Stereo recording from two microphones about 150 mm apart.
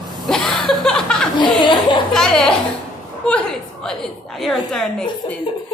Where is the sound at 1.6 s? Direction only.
30° left (ahead or behind).